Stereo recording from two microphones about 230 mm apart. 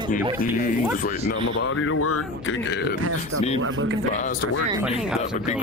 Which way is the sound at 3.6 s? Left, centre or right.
Right.